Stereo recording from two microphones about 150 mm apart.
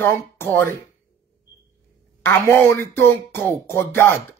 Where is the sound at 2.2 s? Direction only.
15° left (ahead or behind).